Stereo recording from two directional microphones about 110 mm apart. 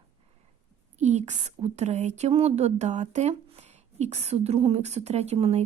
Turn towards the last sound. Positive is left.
turn(degrees=-70)  # may be behind; listen again after turning